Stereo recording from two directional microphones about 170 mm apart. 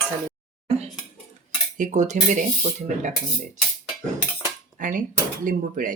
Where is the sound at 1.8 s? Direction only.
45° right (ahead or behind).